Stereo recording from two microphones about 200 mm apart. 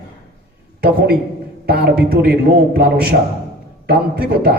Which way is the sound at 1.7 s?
50° right (ahead or behind).